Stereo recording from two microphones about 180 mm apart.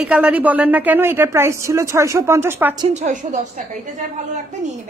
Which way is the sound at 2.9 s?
45° right (ahead or behind).